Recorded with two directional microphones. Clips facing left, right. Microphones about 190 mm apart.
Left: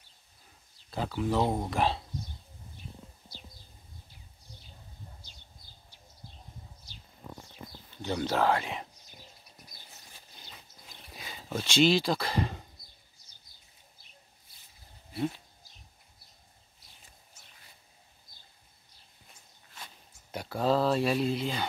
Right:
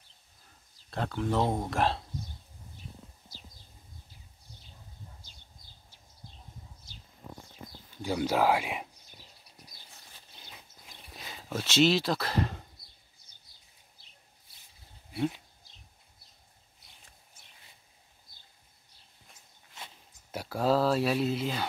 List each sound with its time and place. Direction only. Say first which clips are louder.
0.8 s speech: left 1 dB; 5° left (ahead or behind)
8.0 s speech: right 1 dB; 10° right (ahead or behind)
11.1 s speech: even; centre (ahead or behind)
19.7 s a sound: right 1 dB; 20° right (ahead or behind)
20.2 s speech: even; 5° right (ahead or behind)